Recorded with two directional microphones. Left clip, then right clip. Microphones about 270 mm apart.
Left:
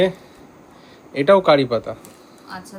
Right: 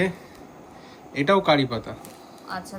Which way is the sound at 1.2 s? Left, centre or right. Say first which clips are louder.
Left 6 dB; centre.